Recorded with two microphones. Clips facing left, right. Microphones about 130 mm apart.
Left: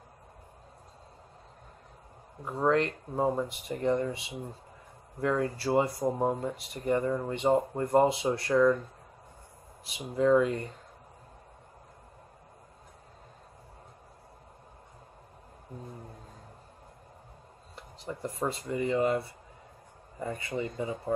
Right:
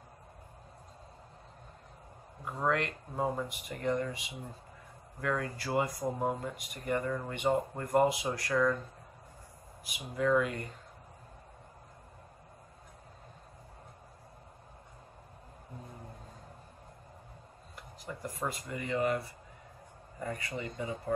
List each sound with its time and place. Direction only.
2.7 s speech: 30° left (ahead or behind)
9.8 s speech: 30° left (ahead or behind)
17.7 s speech: 25° left (ahead or behind)